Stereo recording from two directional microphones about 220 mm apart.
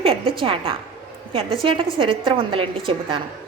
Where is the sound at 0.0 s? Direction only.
25° right (ahead or behind).